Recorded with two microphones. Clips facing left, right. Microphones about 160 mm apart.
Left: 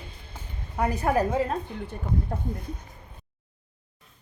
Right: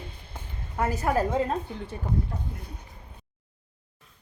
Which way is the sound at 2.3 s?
50° left (ahead or behind).